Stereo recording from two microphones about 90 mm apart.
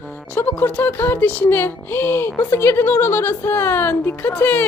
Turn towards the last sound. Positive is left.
turn(degrees=20)  # may be behind; listen again after turning